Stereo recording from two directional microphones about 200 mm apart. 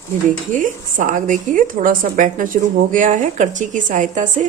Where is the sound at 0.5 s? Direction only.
40° right (ahead or behind).